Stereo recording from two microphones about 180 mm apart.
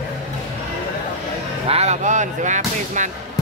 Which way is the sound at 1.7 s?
35° right (ahead or behind).